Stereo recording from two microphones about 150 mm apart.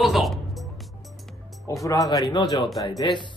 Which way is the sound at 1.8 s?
25° left (ahead or behind).